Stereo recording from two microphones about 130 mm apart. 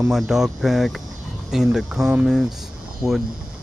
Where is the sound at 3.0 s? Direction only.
20° right (ahead or behind).